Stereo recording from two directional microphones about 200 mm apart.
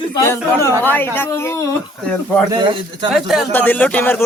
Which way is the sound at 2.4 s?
20° right (ahead or behind).